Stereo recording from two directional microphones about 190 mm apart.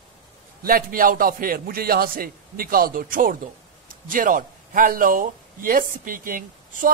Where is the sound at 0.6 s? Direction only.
50° right (ahead or behind).